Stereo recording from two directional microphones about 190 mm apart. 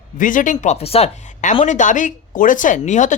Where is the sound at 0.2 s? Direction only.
45° left (ahead or behind).